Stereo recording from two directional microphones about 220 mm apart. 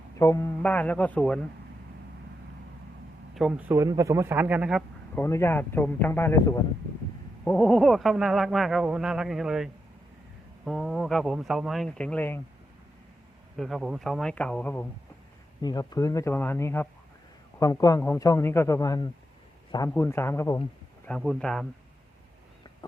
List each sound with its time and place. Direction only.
0.2 s a man's voice: 15° left (ahead or behind)
3.3 s a man's voice: 5° right (ahead or behind)
5.1 s a man's voice: 10° left (ahead or behind)
10.7 s speech: centre (ahead or behind)
13.6 s speech: centre (ahead or behind)
15.6 s a man's voice: 20° left (ahead or behind)
21.1 s speech: 5° left (ahead or behind)